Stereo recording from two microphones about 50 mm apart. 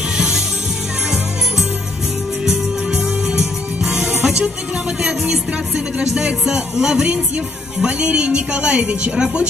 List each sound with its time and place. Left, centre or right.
2.4 s music: centre
5.0 s a woman's voice: right